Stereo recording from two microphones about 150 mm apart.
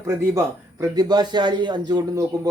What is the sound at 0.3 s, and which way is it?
Speech, 25° right (ahead or behind).